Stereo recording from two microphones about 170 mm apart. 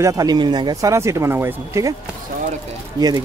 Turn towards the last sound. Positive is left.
turn(degrees=-25)  # may be behind; listen again after turning